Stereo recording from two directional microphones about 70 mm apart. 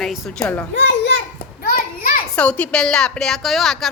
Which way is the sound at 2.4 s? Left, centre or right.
Centre.